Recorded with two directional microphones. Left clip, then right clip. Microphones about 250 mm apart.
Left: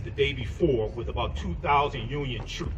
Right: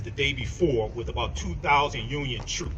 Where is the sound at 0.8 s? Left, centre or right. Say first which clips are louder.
Right 1 dB; right.